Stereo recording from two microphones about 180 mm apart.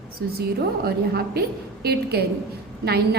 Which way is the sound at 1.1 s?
60° right (ahead or behind).